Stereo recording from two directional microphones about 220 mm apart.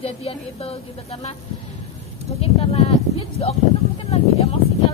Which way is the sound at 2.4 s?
25° left (ahead or behind).